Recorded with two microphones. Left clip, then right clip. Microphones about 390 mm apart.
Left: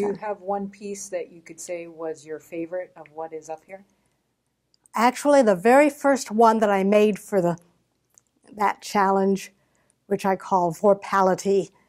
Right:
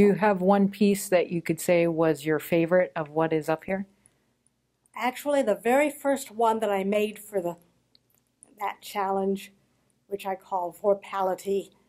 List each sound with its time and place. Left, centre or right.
0.0 s speech: right
4.9 s speech: left
8.5 s speech: left